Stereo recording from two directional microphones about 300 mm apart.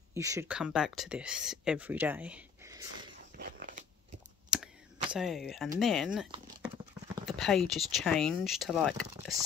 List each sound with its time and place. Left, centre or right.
0.1 s speech: centre
3.3 s biting: right
4.5 s clicking: centre
5.1 s speech: centre
7.2 s speech: centre